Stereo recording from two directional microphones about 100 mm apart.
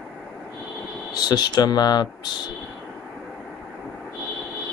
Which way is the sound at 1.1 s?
45° left (ahead or behind).